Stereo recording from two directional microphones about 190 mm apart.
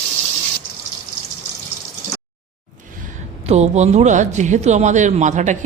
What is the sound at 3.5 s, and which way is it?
Speech, 35° right (ahead or behind).